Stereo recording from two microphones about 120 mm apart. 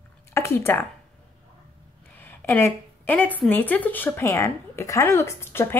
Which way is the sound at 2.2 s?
20° left (ahead or behind).